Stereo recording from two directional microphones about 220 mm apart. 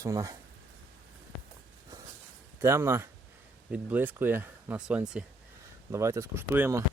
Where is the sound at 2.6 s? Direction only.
10° right (ahead or behind).